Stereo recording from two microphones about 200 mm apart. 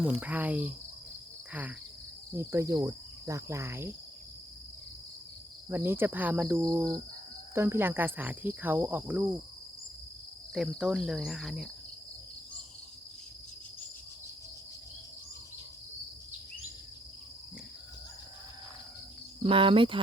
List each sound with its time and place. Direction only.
0.2 s cricket: 10° right (ahead or behind)
2.3 s cricket: 15° right (ahead or behind)
5.6 s cricket: 10° right (ahead or behind)
10.5 s speech: 5° right (ahead or behind)
19.4 s speech: 25° right (ahead or behind)